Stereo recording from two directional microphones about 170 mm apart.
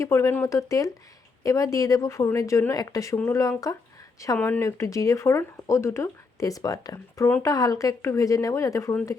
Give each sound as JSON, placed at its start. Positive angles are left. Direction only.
{"t": 0.0, "sound": "a woman's voice", "side_deg": 15}